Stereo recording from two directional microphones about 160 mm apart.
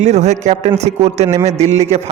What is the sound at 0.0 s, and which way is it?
A man's voice, 45° right (ahead or behind).